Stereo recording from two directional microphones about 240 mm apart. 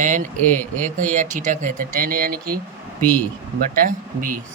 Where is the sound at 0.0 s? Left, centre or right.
Right.